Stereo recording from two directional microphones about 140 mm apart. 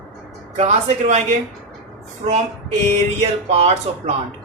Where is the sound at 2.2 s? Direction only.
50° right (ahead or behind).